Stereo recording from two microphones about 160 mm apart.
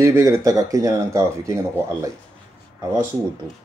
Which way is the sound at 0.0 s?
20° right (ahead or behind).